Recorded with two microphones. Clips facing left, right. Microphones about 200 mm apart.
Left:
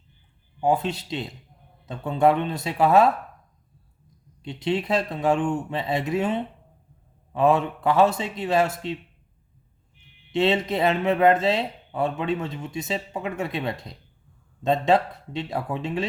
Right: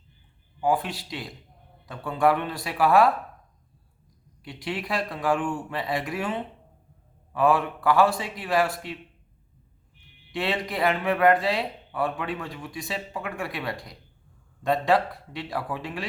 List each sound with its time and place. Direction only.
0.6 s speech: 25° left (ahead or behind)
4.4 s speech: 25° left (ahead or behind)
10.3 s speech: 25° left (ahead or behind)